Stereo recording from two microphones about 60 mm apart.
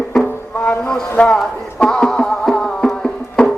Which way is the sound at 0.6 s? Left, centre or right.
Centre.